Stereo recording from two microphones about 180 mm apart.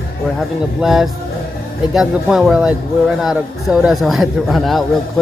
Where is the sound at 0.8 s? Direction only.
Centre (ahead or behind).